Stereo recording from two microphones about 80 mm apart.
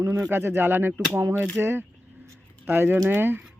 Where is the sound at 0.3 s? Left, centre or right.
Right.